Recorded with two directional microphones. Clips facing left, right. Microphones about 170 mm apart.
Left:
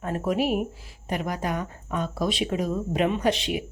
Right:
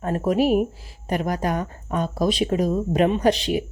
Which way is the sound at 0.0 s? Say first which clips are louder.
Right 5 dB; 40° right (ahead or behind).